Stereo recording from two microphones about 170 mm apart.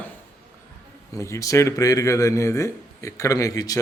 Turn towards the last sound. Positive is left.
turn(degrees=20)  # may be behind; listen again after turning